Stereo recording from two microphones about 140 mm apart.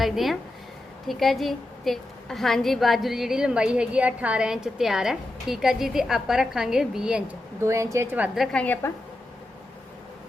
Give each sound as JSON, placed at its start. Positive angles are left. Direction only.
{"t": 0.0, "sound": "a woman's voice", "side_deg": 0}
{"t": 7.6, "sound": "speech", "side_deg": -20}
{"t": 8.4, "sound": "a woman's voice", "side_deg": 10}